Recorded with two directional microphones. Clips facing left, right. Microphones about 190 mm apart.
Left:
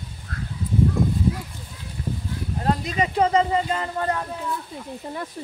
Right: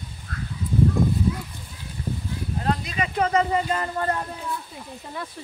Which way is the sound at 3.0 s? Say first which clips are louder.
Left 3 dB; 25° left (ahead or behind).